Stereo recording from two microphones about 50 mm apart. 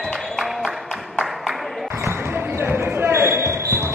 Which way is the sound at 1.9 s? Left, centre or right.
Right.